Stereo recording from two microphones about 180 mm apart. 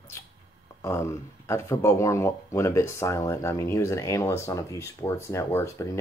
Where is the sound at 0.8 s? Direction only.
15° left (ahead or behind).